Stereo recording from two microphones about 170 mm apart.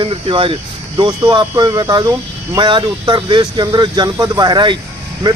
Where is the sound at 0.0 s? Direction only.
30° right (ahead or behind).